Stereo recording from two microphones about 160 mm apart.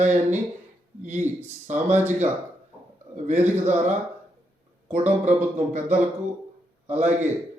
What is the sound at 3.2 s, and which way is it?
Speech, 45° right (ahead or behind).